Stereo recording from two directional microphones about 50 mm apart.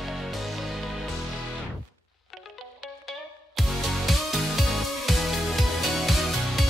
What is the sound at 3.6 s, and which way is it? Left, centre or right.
Music, centre.